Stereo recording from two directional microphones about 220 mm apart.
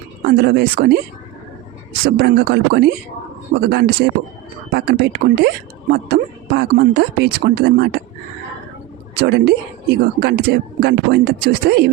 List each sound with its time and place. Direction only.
0.3 s speech: 45° right (ahead or behind)
2.0 s speech: 45° right (ahead or behind)
9.1 s speech: 45° right (ahead or behind)